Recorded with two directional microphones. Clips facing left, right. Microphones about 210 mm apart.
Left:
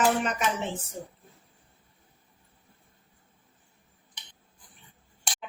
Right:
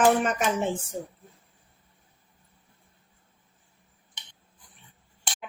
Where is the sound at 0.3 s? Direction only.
45° right (ahead or behind).